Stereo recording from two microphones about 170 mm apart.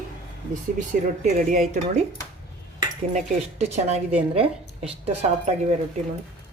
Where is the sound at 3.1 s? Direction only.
40° right (ahead or behind).